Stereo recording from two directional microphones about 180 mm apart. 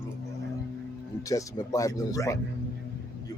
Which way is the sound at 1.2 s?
20° left (ahead or behind).